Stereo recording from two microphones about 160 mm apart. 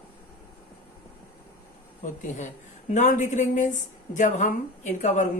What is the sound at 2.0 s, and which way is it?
A woman's voice, 50° left (ahead or behind).